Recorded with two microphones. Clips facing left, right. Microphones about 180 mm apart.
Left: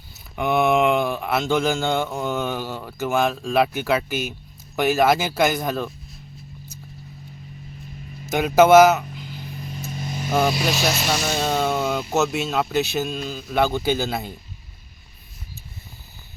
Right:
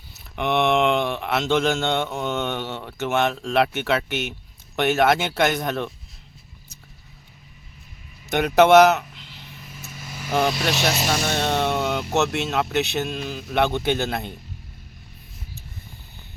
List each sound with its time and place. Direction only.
0.3 s speech: centre (ahead or behind)
8.3 s speech: centre (ahead or behind)
9.7 s vehicle: 30° left (ahead or behind)
10.3 s speech: 10° left (ahead or behind)
11.1 s music: 5° left (ahead or behind)
12.1 s speech: centre (ahead or behind)